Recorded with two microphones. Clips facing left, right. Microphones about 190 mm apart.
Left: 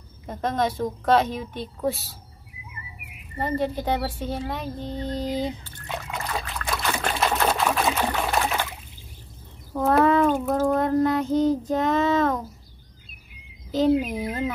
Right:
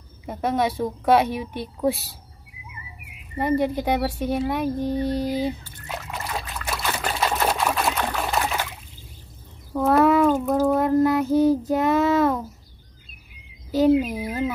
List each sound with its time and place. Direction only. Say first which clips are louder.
0.3 s speech: right 2 dB; 10° right (ahead or behind)
3.3 s speech: right 4 dB; 15° right (ahead or behind)
6.6 s trickle: left 1 dB; 5° right (ahead or behind)
9.8 s speech: right 2 dB; 5° right (ahead or behind)
13.7 s speech: right 3 dB; 10° right (ahead or behind)